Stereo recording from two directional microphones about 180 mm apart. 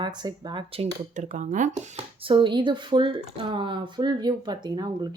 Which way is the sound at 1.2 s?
45° right (ahead or behind).